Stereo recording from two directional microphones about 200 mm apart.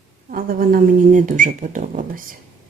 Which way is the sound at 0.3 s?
45° right (ahead or behind).